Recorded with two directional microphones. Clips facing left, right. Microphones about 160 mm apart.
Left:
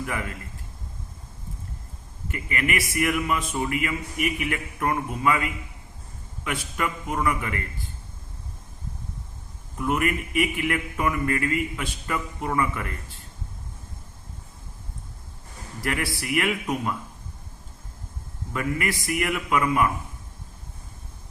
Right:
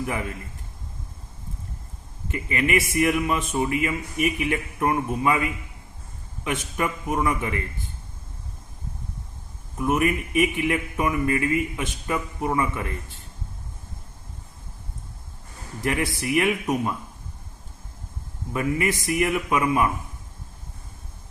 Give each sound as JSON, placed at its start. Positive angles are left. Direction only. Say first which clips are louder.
{"t": 0.0, "sound": "speech", "louder": "right 2 dB", "side_deg": -20}
{"t": 2.3, "sound": "speech", "louder": "right 4 dB", "side_deg": -20}
{"t": 9.7, "sound": "speech", "louder": "right 2 dB", "side_deg": -20}
{"t": 15.8, "sound": "speech", "louder": "right 3 dB", "side_deg": -20}
{"t": 18.5, "sound": "speech", "louder": "right 3 dB", "side_deg": -20}